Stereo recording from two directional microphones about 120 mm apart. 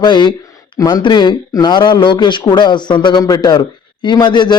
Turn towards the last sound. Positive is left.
turn(degrees=40)  # may be behind; listen again after turning